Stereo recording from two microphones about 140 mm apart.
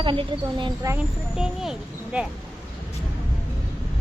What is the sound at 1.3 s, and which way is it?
Speech, 5° right (ahead or behind).